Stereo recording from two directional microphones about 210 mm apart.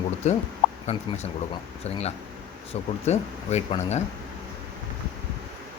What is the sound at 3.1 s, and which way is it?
Speech, 30° left (ahead or behind).